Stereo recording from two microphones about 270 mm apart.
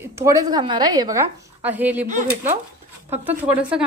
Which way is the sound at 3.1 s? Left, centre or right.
Centre.